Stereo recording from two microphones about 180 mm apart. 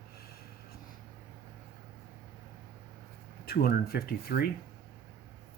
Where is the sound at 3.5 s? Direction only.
60° left (ahead or behind).